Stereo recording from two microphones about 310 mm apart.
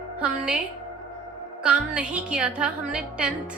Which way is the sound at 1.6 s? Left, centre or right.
Centre.